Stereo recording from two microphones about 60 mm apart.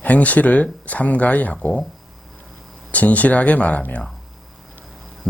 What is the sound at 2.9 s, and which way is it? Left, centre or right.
Speech, left.